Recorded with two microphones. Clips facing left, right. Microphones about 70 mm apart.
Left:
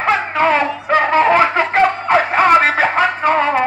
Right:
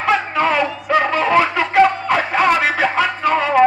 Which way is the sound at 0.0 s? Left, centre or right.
Left.